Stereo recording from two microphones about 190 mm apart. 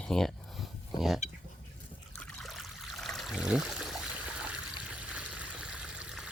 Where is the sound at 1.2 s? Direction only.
35° left (ahead or behind).